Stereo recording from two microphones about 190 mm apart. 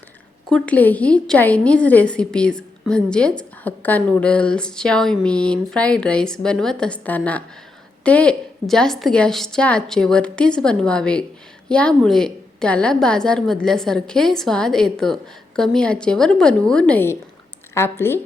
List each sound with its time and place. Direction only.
0.4 s a woman's voice: 5° left (ahead or behind)